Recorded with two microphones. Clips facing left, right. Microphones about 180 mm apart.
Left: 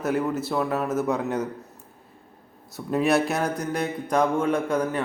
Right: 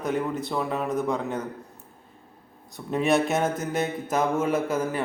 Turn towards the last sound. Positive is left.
turn(degrees=-5)  # may be behind; listen again after turning